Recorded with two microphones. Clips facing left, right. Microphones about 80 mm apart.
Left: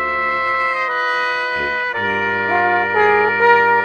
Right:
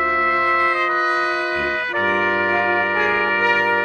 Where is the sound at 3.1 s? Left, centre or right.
Centre.